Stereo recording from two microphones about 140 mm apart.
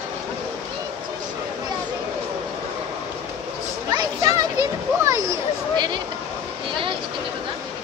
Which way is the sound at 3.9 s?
25° right (ahead or behind).